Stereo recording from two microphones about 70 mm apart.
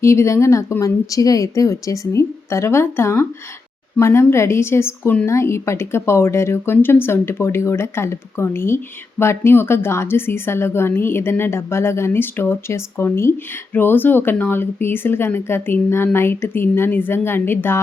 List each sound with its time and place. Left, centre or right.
0.0 s a woman's voice: left